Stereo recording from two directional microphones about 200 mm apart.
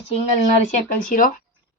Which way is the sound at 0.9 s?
45° left (ahead or behind).